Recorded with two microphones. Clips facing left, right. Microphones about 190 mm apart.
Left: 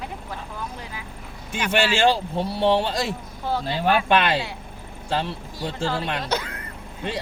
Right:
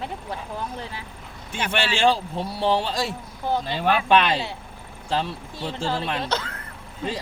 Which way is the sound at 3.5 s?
15° right (ahead or behind).